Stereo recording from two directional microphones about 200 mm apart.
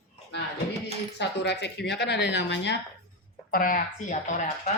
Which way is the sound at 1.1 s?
60° left (ahead or behind).